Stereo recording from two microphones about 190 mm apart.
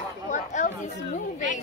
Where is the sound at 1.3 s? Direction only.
40° left (ahead or behind).